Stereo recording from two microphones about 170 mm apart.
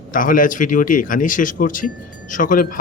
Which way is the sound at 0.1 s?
55° left (ahead or behind).